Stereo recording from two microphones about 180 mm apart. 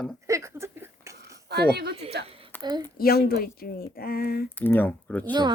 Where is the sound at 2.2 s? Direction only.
30° right (ahead or behind).